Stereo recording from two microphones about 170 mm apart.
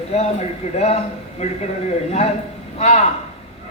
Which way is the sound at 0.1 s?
40° left (ahead or behind).